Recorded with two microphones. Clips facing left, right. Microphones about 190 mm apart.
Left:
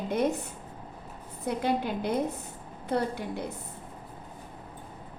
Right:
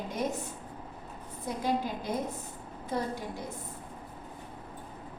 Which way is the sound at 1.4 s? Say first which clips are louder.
Left 3 dB; 65° left (ahead or behind).